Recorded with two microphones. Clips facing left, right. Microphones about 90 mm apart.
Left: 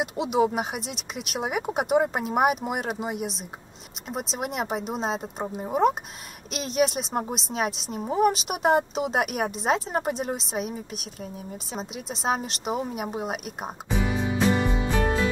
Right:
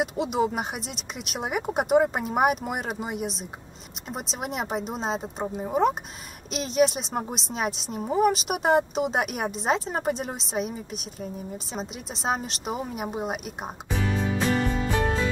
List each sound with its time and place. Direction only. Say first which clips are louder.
0.0 s speech: left 1 dB; centre (ahead or behind)
13.9 s music: left 1 dB; 15° left (ahead or behind)